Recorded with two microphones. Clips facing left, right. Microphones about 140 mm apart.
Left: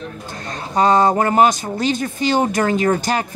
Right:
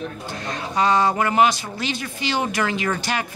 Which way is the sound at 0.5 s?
45° left (ahead or behind).